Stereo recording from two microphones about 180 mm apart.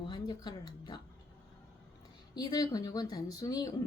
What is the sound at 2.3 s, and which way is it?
Speech, 20° left (ahead or behind).